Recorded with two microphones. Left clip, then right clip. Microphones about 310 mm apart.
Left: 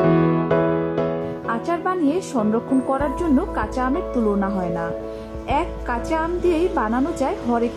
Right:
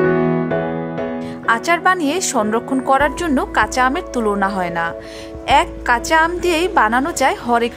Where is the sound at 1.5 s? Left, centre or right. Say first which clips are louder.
Right 9 dB; right.